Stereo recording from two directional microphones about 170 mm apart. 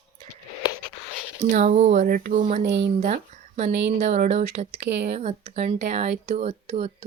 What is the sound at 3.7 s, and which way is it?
Speech, 90° right.